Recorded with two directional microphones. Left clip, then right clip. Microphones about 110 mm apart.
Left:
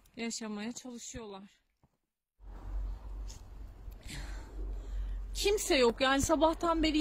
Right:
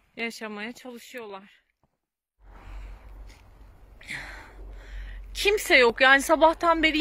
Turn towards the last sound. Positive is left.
turn(degrees=-45)  # may be behind; listen again after turning